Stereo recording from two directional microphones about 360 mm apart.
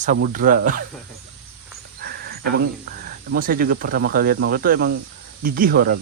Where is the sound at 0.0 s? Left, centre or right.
Right.